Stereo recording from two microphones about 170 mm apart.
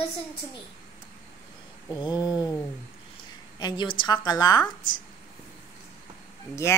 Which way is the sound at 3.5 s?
25° left (ahead or behind).